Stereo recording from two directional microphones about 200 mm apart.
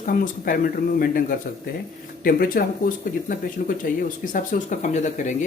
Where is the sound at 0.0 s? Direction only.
45° left (ahead or behind).